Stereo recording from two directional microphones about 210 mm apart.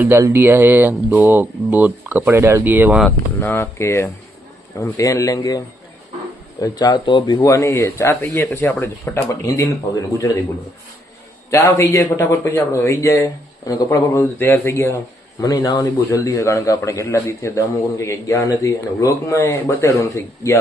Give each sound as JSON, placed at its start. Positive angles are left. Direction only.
{"t": 0.0, "sound": "speech", "side_deg": -10}
{"t": 3.1, "sound": "a man's voice", "side_deg": 10}
{"t": 11.5, "sound": "a man's voice", "side_deg": 15}